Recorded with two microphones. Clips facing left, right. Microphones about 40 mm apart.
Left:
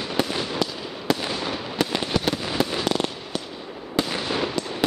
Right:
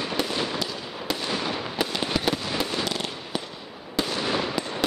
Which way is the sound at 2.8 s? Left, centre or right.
Centre.